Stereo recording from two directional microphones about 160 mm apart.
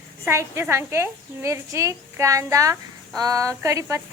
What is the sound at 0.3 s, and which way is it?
A woman's voice, 15° right (ahead or behind).